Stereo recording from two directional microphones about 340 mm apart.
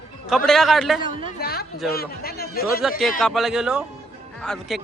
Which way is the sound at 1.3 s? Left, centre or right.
Left.